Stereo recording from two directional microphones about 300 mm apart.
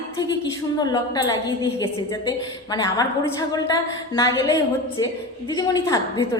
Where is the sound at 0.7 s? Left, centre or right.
Centre.